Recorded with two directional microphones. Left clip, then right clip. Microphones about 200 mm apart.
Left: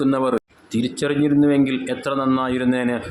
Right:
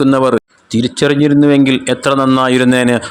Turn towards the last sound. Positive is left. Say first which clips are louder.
# right 10 dB
turn(degrees=-40)  # may be behind; listen again after turning